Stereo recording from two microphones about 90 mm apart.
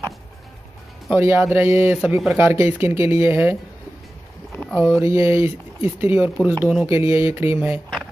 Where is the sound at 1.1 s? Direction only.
25° right (ahead or behind).